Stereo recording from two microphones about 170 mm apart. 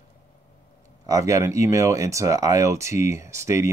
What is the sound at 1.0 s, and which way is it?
Speech, 20° right (ahead or behind).